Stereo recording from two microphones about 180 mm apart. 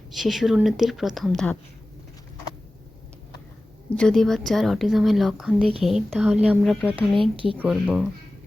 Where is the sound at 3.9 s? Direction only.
5° left (ahead or behind).